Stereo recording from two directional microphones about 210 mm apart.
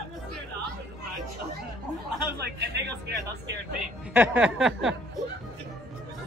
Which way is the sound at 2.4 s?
55° right (ahead or behind).